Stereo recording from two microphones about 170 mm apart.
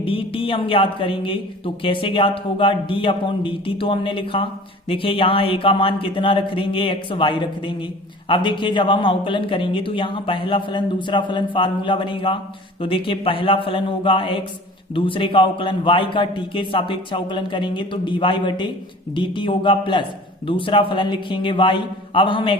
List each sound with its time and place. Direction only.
0.0 s a man's voice: 30° left (ahead or behind)